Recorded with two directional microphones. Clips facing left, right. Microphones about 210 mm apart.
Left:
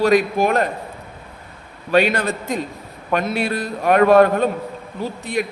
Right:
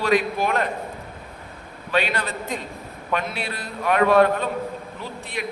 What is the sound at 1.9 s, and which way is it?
A man's voice, 45° left (ahead or behind).